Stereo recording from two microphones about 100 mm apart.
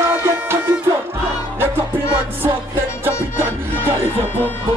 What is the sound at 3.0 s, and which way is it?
Music, 25° right (ahead or behind).